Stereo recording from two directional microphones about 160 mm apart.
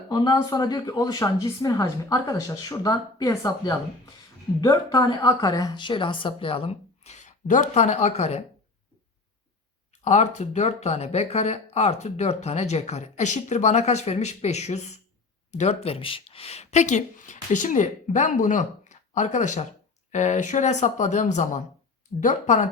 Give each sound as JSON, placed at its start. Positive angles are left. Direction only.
{"t": 0.1, "sound": "a woman's voice", "side_deg": 25}
{"t": 10.0, "sound": "speech", "side_deg": 45}